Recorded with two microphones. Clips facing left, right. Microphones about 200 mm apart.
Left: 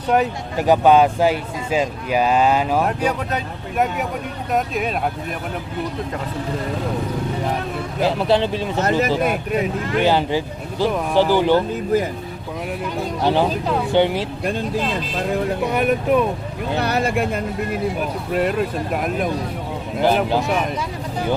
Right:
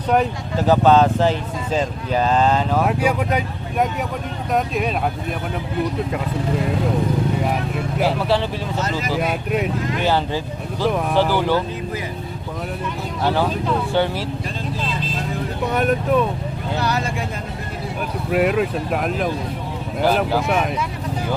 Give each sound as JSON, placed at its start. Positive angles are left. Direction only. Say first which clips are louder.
{"t": 0.5, "sound": "speech", "louder": "left 1 dB", "side_deg": 15}
{"t": 2.8, "sound": "speech", "louder": "right 2 dB", "side_deg": -10}
{"t": 4.5, "sound": "speech", "louder": "right 1 dB", "side_deg": 0}
{"t": 8.0, "sound": "speech", "louder": "left 3 dB", "side_deg": 20}
{"t": 8.8, "sound": "speech", "louder": "left 7 dB", "side_deg": 55}
{"t": 9.2, "sound": "speech", "louder": "left 1 dB", "side_deg": -5}
{"t": 10.0, "sound": "speech", "louder": "left 4 dB", "side_deg": 15}
{"t": 13.2, "sound": "speech", "louder": "left 1 dB", "side_deg": 20}
{"t": 15.7, "sound": "speech", "louder": "even", "side_deg": 10}
{"t": 16.7, "sound": "speech", "louder": "left 4 dB", "side_deg": 60}
{"t": 18.3, "sound": "speech", "louder": "right 3 dB", "side_deg": -5}